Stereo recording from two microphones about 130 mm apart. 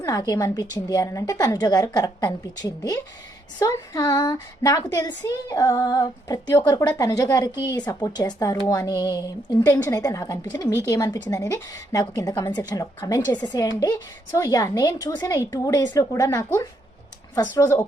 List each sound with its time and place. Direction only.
0.0 s speech: 25° left (ahead or behind)